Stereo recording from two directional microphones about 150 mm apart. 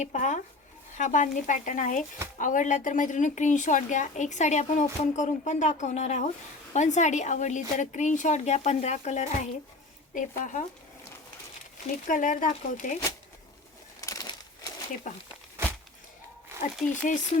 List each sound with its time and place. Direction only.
0.0 s a woman's voice: 55° left (ahead or behind)
12.0 s a woman's voice: 65° left (ahead or behind)
14.0 s crushing: 20° left (ahead or behind)
15.1 s a woman's voice: 55° left (ahead or behind)
16.9 s a woman's voice: 55° left (ahead or behind)